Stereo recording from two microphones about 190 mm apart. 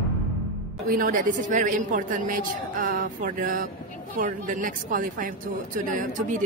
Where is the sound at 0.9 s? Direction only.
45° right (ahead or behind).